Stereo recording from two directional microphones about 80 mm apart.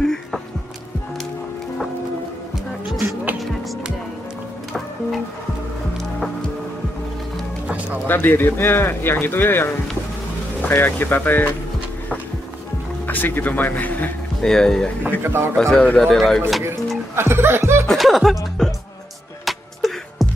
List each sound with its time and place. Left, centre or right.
0.0 s music: centre
7.6 s music: centre
8.1 s speech: left
13.0 s speech: left
14.4 s speech: centre
15.0 s speech: right
15.5 s speech: centre
17.1 s chuckle: right
17.8 s speech: centre
19.4 s music: centre